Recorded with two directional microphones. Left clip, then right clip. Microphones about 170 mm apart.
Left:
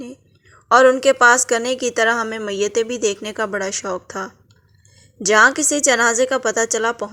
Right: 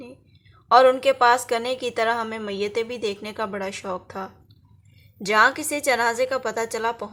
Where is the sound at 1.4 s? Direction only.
25° left (ahead or behind).